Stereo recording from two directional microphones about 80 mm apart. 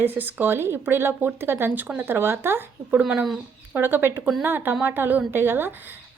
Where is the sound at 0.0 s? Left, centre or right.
Right.